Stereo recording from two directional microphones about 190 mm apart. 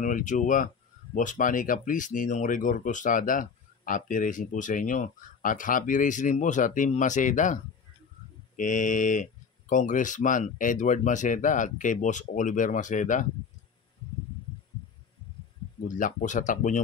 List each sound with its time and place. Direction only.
0.0 s speech: 40° left (ahead or behind)
16.0 s speech: 40° left (ahead or behind)